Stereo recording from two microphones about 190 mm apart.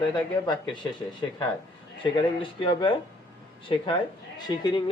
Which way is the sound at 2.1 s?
25° left (ahead or behind).